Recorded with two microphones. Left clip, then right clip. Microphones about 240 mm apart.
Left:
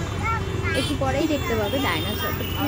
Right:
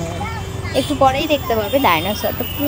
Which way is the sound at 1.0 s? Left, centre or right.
Right.